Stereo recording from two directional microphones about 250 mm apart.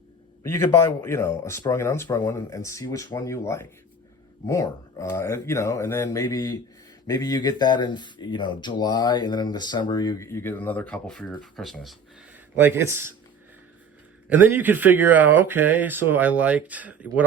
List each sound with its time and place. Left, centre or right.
0.4 s speech: centre
14.3 s speech: centre